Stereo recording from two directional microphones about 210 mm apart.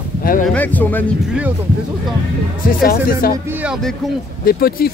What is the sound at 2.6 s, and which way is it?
Speech, 40° left (ahead or behind).